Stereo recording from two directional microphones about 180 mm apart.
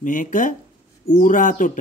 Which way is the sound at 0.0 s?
45° left (ahead or behind).